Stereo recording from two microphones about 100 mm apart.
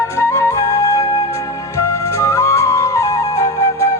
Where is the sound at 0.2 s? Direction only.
25° left (ahead or behind).